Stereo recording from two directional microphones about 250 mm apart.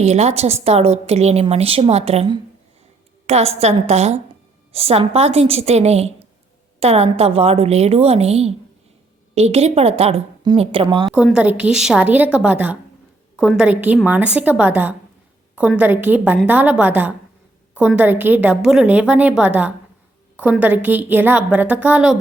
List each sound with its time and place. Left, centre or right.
0.0 s a woman's voice: right
11.0 s a woman's voice: centre